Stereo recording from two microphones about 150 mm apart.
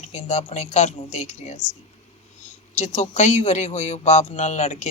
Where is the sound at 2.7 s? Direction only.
50° left (ahead or behind).